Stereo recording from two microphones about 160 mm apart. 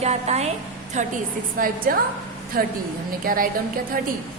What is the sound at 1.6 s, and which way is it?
A woman's voice, 65° right (ahead or behind).